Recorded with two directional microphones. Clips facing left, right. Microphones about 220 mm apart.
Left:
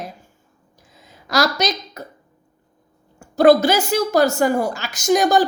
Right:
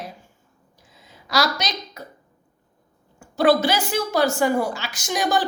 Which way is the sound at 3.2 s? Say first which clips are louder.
Left 5 dB; 45° left (ahead or behind).